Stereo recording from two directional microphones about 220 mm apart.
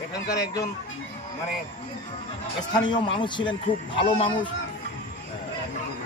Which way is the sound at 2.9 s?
20° left (ahead or behind).